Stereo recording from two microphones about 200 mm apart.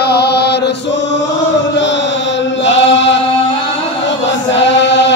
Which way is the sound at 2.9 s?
65° left (ahead or behind).